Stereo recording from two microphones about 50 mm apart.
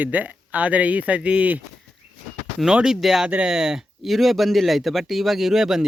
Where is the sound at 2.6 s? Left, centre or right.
Centre.